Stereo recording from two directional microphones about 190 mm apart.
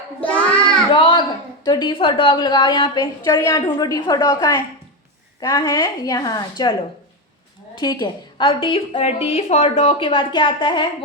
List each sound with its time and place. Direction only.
0.9 s a woman's voice: 25° left (ahead or behind)
7.8 s a woman's voice: 20° left (ahead or behind)